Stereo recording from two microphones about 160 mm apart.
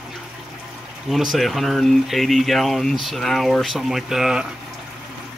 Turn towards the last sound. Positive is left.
turn(degrees=-5)  # may be behind; listen again after turning